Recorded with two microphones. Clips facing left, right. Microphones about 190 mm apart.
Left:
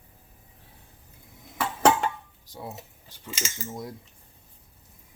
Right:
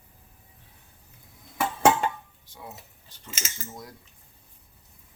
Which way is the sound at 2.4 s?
40° left (ahead or behind).